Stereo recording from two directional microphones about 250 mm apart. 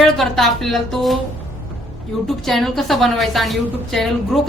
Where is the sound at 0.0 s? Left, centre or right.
Centre.